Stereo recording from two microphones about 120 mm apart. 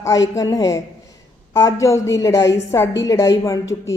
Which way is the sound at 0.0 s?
30° left (ahead or behind).